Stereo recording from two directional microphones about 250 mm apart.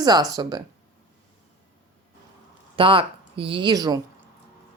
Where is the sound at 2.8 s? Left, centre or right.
Right.